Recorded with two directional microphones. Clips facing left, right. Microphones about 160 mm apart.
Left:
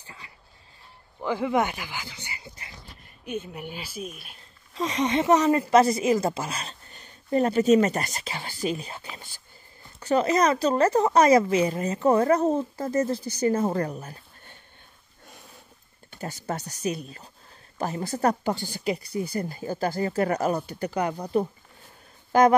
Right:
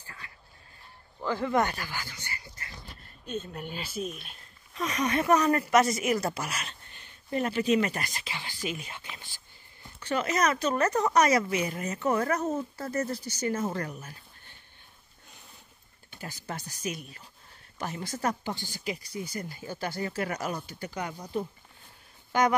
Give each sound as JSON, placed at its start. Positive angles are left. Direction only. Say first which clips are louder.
{"t": 0.0, "sound": "vehicle", "louder": "left 1 dB", "side_deg": 15}
{"t": 1.2, "sound": "speech", "louder": "left 2 dB", "side_deg": 15}
{"t": 4.7, "sound": "a woman's voice", "louder": "left 4 dB", "side_deg": 25}
{"t": 16.1, "sound": "a woman's voice", "louder": "left 7 dB", "side_deg": 40}
{"t": 20.5, "sound": "speech", "louder": "left 8 dB", "side_deg": 65}